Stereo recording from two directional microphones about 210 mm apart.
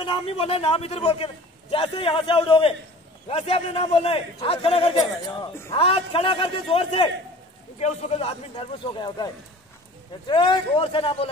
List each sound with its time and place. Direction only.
0.0 s a man's voice: 25° left (ahead or behind)